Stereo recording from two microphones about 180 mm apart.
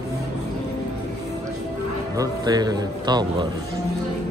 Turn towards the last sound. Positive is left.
turn(degrees=-25)  # may be behind; listen again after turning